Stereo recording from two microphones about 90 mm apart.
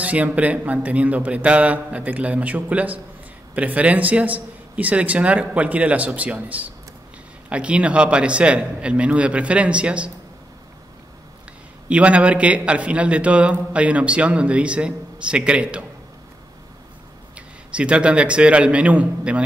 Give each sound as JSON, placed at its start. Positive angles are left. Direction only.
{"t": 0.0, "sound": "a man's voice", "side_deg": -15}
{"t": 11.9, "sound": "a man's voice", "side_deg": -15}
{"t": 17.7, "sound": "a man's voice", "side_deg": -15}